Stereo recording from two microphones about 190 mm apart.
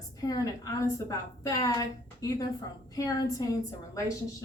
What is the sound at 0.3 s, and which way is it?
A woman's voice, 20° left (ahead or behind).